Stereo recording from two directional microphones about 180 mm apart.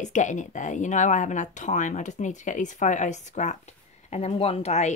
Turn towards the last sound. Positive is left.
turn(degrees=35)  # may be behind; listen again after turning